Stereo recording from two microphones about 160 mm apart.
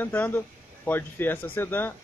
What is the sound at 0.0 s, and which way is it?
Speech, 10° left (ahead or behind).